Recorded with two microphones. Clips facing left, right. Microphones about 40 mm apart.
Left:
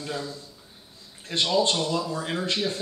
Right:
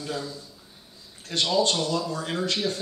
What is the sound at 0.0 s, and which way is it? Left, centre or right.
Speech, centre.